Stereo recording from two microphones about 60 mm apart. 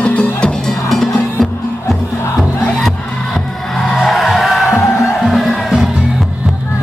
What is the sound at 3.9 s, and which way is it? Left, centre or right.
Music, centre.